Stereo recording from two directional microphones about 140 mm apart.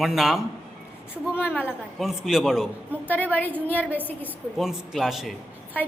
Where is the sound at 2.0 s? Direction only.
5° right (ahead or behind).